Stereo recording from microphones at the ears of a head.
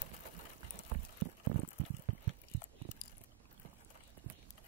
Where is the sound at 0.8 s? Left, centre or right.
Right.